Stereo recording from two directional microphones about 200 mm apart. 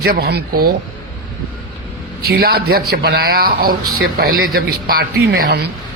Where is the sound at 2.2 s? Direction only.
50° right (ahead or behind).